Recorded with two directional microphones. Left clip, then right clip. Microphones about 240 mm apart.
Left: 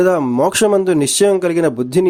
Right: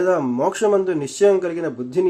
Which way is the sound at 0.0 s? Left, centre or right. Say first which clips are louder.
Left 5 dB; left.